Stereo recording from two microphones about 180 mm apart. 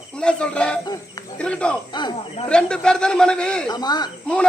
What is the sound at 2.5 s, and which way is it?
A man's voice, 5° left (ahead or behind).